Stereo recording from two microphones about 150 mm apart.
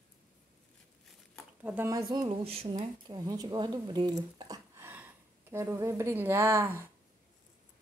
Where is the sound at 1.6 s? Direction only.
15° right (ahead or behind).